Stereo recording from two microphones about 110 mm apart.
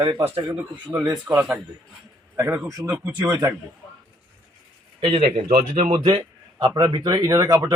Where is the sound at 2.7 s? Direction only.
30° right (ahead or behind).